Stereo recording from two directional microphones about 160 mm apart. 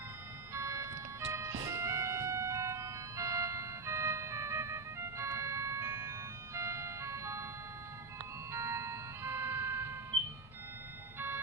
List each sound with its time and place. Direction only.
0.5 s music: 15° right (ahead or behind)
8.5 s music: 15° right (ahead or behind)